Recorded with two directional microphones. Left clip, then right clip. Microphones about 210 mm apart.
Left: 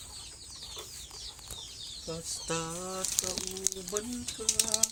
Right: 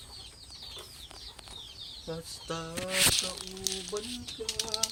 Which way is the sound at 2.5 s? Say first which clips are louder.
Left 3 dB; 55° left (ahead or behind).